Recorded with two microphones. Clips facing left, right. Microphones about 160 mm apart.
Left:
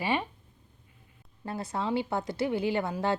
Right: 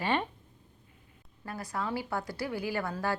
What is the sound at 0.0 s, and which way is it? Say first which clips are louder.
Speech: even; 10° left (ahead or behind).